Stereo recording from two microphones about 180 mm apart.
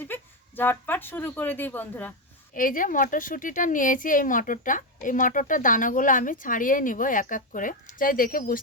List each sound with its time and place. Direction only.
0.0 s speech: 10° left (ahead or behind)
2.5 s speech: 50° left (ahead or behind)